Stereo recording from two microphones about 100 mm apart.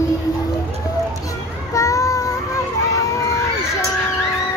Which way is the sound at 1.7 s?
30° left (ahead or behind).